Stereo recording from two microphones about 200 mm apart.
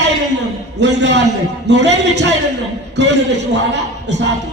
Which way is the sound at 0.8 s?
60° right (ahead or behind).